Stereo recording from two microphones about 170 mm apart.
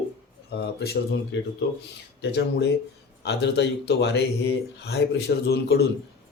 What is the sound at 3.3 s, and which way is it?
Speech, 85° left.